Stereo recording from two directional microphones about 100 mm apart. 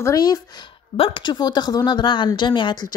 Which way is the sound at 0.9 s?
70° left (ahead or behind).